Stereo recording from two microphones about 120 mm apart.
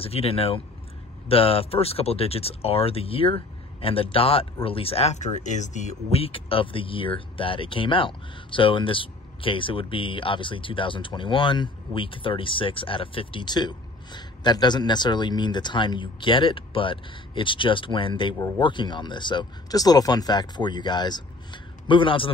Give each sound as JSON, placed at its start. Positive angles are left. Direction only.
{"t": 0.0, "sound": "speech", "side_deg": 55}
{"t": 6.2, "sound": "speech", "side_deg": 50}